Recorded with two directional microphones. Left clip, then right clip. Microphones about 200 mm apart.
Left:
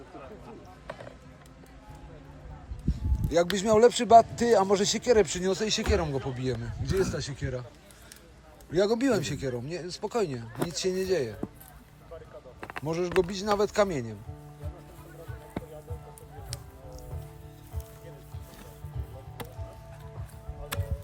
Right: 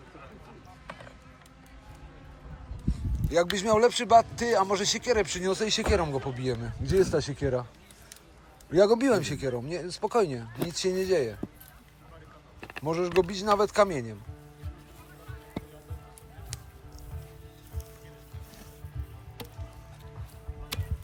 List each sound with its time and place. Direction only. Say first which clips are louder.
0.9 s music: left 2 dB; 50° left (ahead or behind)
2.9 s speech: even; 15° left (ahead or behind)
8.7 s speech: right 3 dB; 5° left (ahead or behind)
12.5 s speech: right 2 dB; 5° left (ahead or behind)